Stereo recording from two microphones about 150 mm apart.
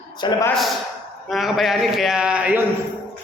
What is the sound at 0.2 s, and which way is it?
Speech, 30° left (ahead or behind).